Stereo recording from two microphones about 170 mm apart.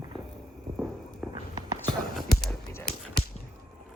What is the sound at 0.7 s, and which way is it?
Walk, 25° right (ahead or behind).